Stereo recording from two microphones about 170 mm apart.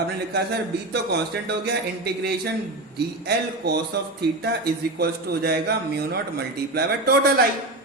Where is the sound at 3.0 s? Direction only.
70° right (ahead or behind).